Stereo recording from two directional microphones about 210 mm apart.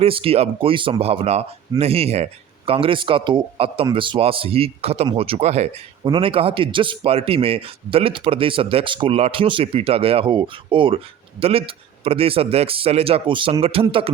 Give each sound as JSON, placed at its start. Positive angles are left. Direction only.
{"t": 0.0, "sound": "a man's voice", "side_deg": -25}